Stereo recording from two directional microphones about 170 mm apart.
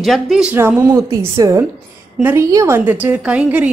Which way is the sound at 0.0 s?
Centre (ahead or behind).